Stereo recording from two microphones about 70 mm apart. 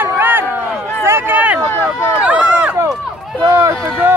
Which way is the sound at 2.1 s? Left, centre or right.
Centre.